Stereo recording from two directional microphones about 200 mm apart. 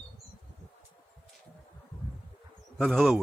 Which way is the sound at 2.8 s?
Centre (ahead or behind).